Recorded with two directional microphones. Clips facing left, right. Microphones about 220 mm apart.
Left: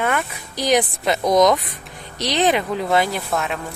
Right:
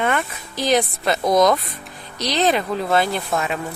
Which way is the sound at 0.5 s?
15° left (ahead or behind).